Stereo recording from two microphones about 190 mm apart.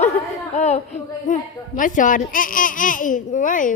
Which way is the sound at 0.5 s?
35° left (ahead or behind).